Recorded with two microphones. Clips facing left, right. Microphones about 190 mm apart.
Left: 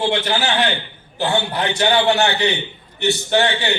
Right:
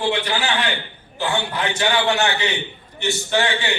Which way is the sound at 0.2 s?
40° left (ahead or behind).